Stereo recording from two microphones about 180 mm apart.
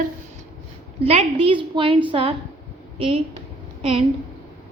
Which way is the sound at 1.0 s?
35° right (ahead or behind).